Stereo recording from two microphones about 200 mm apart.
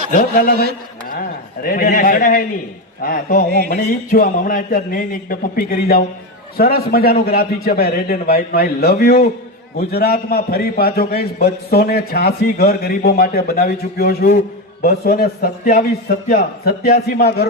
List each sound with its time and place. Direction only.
0.1 s a man's voice: 40° left (ahead or behind)
1.6 s a man's voice: 45° left (ahead or behind)